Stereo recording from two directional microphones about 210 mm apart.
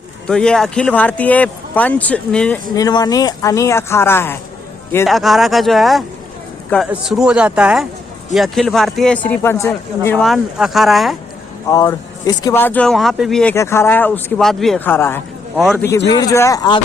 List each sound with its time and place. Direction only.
0.3 s a man's voice: 5° left (ahead or behind)
2.7 s speech: 20° left (ahead or behind)
5.0 s a man's voice: centre (ahead or behind)
11.7 s speech: 15° left (ahead or behind)
15.5 s a man's voice: centre (ahead or behind)
16.0 s speech: 20° left (ahead or behind)